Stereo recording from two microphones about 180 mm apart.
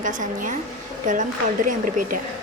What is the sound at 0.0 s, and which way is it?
Speech, 45° right (ahead or behind).